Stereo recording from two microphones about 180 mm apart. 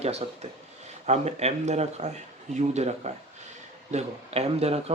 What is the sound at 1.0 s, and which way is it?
Speech, 40° right (ahead or behind).